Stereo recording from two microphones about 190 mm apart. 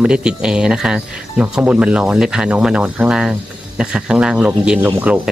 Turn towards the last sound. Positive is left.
turn(degrees=-10)  # may be behind; listen again after turning